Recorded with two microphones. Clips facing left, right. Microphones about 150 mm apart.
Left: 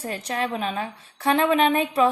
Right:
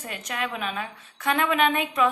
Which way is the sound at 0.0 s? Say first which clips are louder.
Left 4 dB; 35° left (ahead or behind).